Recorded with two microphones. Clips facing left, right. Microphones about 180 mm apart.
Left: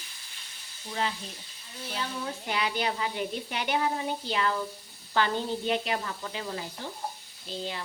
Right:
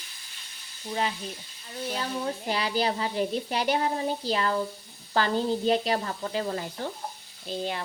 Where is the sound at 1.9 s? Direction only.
35° right (ahead or behind); by 7.6 s 55° right (ahead or behind).